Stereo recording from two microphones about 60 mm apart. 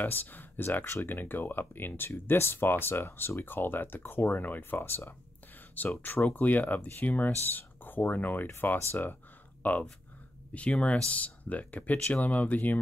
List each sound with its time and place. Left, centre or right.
0.0 s speech: left
0.7 s speech: left
8.9 s a sound: left
10.5 s speech: left